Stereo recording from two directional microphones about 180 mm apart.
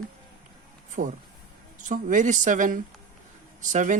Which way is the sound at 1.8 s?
45° right (ahead or behind).